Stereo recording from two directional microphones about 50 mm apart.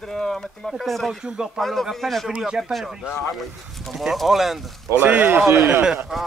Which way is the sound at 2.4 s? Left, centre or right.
Centre.